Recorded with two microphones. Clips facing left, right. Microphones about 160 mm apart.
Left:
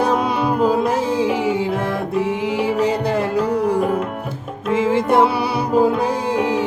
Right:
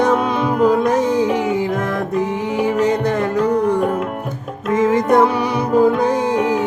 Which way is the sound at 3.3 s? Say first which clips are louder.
Right 3 dB; 10° left (ahead or behind).